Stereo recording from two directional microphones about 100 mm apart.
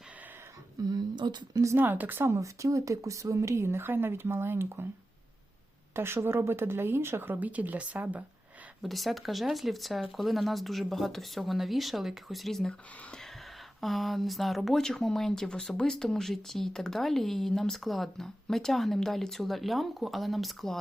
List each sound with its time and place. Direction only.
0.9 s speech: 45° right (ahead or behind)
1.6 s speech: 20° right (ahead or behind)
5.9 s speech: 25° right (ahead or behind)
8.8 s speech: centre (ahead or behind)